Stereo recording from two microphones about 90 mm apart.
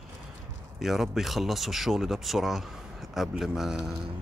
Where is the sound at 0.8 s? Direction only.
Centre (ahead or behind).